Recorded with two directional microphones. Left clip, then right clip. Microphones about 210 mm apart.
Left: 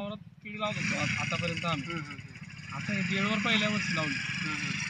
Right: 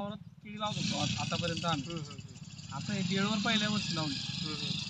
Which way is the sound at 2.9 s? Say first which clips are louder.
Left 4 dB; 20° left (ahead or behind).